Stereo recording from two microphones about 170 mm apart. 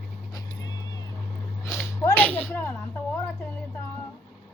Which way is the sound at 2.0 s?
10° left (ahead or behind).